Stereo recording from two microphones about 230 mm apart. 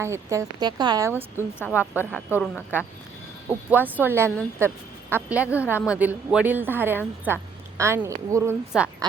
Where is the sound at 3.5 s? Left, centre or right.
Centre.